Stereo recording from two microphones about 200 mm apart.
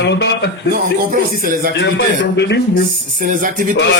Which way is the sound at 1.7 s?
60° left (ahead or behind).